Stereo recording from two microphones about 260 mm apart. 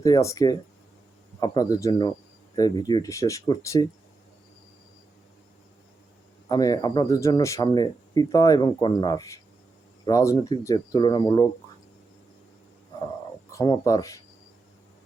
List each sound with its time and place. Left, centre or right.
0.0 s speech: centre
6.5 s speech: centre
13.5 s speech: centre